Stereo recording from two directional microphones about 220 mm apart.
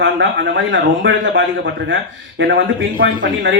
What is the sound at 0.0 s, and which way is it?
Speech, 55° right (ahead or behind).